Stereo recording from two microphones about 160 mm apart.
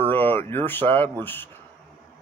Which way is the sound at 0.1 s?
10° left (ahead or behind).